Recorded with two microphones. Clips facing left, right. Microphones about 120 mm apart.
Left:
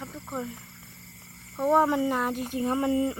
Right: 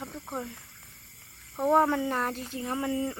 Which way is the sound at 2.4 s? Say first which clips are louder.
Left 5 dB; 20° left (ahead or behind).